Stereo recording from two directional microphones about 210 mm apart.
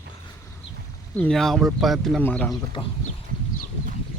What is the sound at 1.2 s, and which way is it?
Speech, 5° left (ahead or behind).